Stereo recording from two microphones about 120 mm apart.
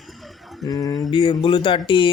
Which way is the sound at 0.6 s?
35° left (ahead or behind).